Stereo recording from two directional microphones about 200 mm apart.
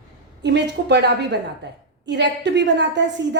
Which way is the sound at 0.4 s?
60° right (ahead or behind).